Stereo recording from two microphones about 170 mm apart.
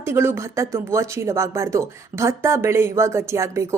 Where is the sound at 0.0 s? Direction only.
15° right (ahead or behind).